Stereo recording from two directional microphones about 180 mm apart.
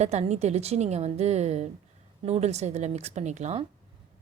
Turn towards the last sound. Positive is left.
turn(degrees=-35)  # may be behind; listen again after turning